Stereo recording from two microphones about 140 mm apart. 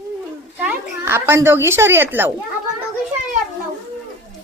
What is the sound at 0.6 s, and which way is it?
A woman's voice, 15° right (ahead or behind).